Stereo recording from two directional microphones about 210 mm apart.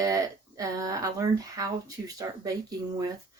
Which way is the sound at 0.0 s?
15° right (ahead or behind).